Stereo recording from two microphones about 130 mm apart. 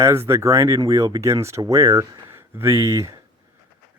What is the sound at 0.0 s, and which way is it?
Speech, 20° right (ahead or behind).